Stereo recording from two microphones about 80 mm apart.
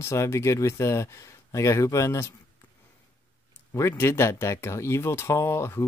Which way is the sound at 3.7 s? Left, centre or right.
Left.